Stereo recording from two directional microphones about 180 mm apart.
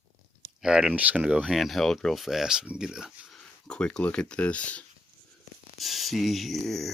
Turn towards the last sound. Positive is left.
turn(degrees=0)  # may be behind; listen again after turning